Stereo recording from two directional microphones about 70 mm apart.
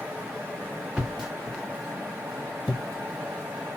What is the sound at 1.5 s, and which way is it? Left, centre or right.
Vehicle, centre.